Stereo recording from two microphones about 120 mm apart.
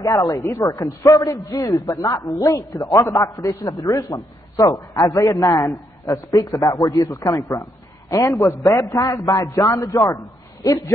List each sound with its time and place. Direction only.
0.0 s a man's voice: 30° left (ahead or behind)
1.5 s a woman's voice: 40° left (ahead or behind)
1.9 s a man's voice: 30° left (ahead or behind)